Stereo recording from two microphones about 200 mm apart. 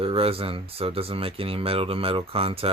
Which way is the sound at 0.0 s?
30° right (ahead or behind).